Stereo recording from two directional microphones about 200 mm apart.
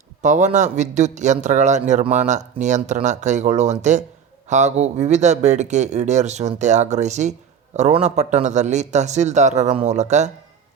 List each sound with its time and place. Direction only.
0.2 s a man's voice: 35° right (ahead or behind)